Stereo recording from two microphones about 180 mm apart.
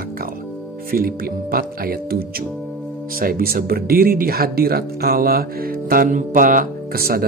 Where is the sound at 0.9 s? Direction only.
55° right (ahead or behind).